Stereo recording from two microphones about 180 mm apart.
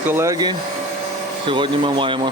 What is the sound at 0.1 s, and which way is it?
Speech, 15° right (ahead or behind).